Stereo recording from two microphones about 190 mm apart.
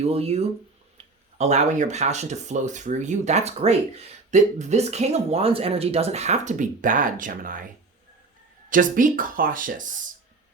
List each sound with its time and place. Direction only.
0.0 s speech: 30° right (ahead or behind)
8.7 s speech: 45° right (ahead or behind)